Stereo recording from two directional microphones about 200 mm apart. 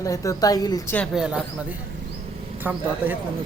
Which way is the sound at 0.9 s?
5° right (ahead or behind).